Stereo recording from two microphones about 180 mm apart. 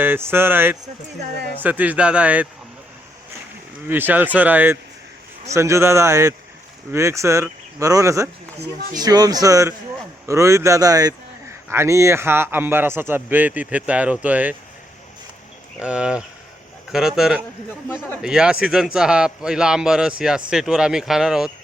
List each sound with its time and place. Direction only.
0.0 s a man's voice: 10° right (ahead or behind)
3.8 s a man's voice: 10° right (ahead or behind)
15.8 s a man's voice: 5° right (ahead or behind)